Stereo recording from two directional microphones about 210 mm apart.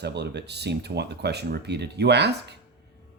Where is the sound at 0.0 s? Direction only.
55° right (ahead or behind).